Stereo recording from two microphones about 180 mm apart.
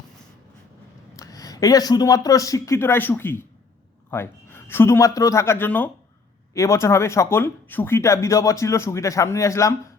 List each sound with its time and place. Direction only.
1.1 s speech: 20° left (ahead or behind)